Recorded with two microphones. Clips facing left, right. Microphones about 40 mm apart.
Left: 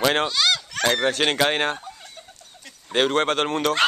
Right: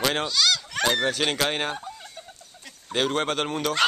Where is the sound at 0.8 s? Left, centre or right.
Centre.